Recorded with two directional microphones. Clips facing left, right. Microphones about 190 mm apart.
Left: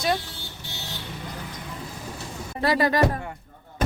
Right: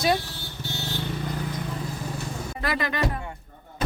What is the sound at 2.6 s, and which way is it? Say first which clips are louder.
Speech: left 7 dB; 35° left (ahead or behind).